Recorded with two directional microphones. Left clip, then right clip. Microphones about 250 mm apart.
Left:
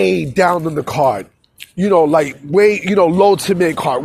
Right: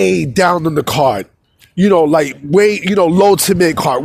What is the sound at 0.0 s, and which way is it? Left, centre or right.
A man's voice, right.